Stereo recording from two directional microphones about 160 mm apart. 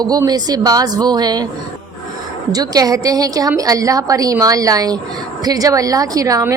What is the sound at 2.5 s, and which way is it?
A woman's voice, 25° right (ahead or behind).